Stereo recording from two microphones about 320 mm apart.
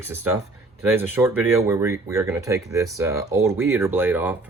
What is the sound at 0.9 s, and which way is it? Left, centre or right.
Speech, centre.